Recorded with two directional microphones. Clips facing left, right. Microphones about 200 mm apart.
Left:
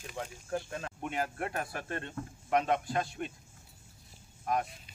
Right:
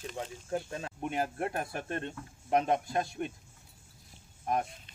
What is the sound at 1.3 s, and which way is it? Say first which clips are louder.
Cricket: right 2 dB; 25° right (ahead or behind).